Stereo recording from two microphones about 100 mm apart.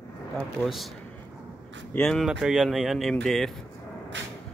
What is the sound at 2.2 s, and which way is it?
Speech, 5° right (ahead or behind).